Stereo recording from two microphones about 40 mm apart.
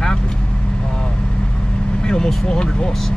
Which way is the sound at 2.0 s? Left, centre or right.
Centre.